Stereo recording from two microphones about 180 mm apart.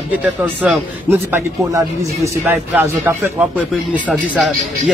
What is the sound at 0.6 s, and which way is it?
Speech, 10° right (ahead or behind).